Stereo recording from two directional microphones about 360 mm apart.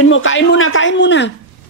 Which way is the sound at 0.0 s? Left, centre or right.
Left.